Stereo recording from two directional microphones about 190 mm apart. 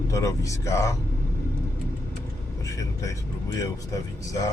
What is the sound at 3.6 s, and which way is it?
Speech, 20° left (ahead or behind).